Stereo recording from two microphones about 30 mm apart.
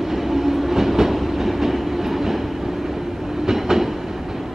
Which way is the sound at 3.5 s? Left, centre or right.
Centre.